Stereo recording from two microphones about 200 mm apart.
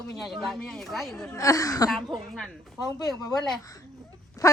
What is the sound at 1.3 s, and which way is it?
Speech, 15° left (ahead or behind).